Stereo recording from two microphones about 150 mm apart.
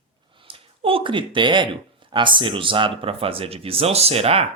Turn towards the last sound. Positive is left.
turn(degrees=-40)  # may be behind; listen again after turning